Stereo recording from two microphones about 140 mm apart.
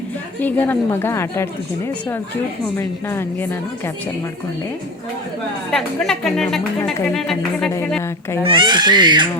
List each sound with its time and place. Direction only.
0.4 s a woman's voice: 15° left (ahead or behind)
5.7 s a woman's voice: 5° left (ahead or behind)
8.4 s speech: 35° right (ahead or behind)